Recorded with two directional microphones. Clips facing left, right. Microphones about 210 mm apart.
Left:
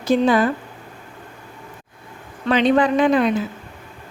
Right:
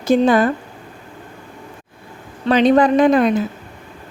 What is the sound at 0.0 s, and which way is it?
Speech, 50° right (ahead or behind).